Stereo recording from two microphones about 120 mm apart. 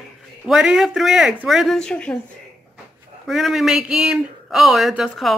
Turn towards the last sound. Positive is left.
turn(degrees=0)  # may be behind; listen again after turning